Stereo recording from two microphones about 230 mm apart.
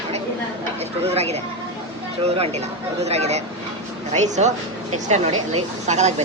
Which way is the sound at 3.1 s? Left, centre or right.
Right.